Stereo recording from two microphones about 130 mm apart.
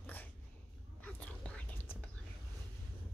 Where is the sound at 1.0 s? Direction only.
10° left (ahead or behind).